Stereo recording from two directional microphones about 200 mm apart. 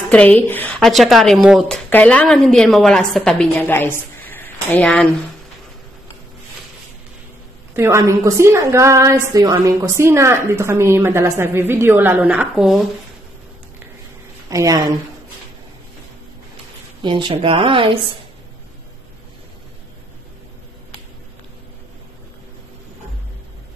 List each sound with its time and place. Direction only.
0.1 s a woman's voice: 10° left (ahead or behind)
7.7 s a woman's voice: 15° right (ahead or behind)
14.5 s a woman's voice: 15° right (ahead or behind)
17.0 s speech: 25° right (ahead or behind)